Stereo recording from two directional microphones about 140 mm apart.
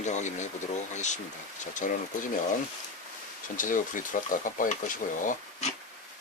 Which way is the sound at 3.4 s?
70° left (ahead or behind).